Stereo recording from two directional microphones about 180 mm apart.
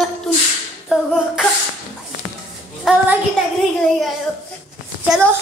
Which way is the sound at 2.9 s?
Centre (ahead or behind).